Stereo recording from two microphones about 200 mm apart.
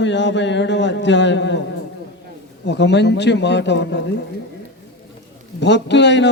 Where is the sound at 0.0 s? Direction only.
60° left (ahead or behind).